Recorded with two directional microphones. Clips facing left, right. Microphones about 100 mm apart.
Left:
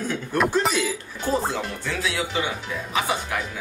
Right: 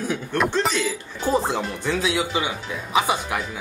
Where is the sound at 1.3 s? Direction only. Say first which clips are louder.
Right 2 dB; 20° right (ahead or behind).